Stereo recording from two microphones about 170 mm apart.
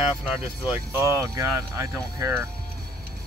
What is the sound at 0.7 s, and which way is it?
Speech, 15° right (ahead or behind).